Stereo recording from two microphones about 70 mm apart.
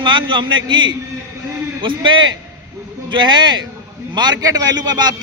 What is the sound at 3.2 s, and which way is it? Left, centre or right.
A man's voice, right.